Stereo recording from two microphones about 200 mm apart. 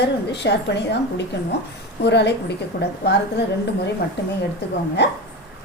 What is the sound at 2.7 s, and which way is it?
Speech, 45° left (ahead or behind).